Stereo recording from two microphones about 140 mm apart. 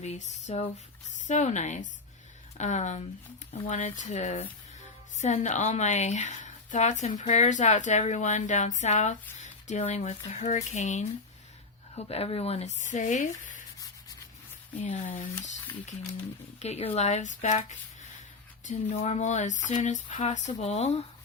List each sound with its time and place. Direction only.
0.0 s speech: 55° left (ahead or behind)
11.9 s speech: 45° left (ahead or behind); by 13.6 s 65° left (ahead or behind)
14.8 s speech: 65° left (ahead or behind)
16.6 s speech: 50° left (ahead or behind)